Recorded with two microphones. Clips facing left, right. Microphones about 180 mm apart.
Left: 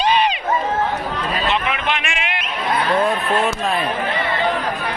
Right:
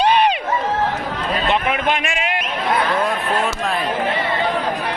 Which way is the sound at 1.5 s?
50° right (ahead or behind).